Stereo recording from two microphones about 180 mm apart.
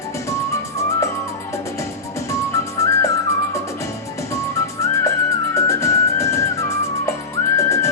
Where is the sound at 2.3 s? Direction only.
15° left (ahead or behind).